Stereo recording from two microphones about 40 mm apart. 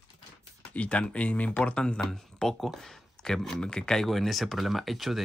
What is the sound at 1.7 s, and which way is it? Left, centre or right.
Speech, left.